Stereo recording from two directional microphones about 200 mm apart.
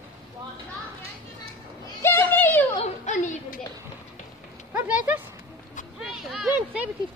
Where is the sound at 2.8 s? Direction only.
35° left (ahead or behind).